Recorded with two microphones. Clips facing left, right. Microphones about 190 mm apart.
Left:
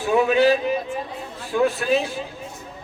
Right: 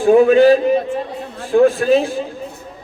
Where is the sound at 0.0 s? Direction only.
45° right (ahead or behind).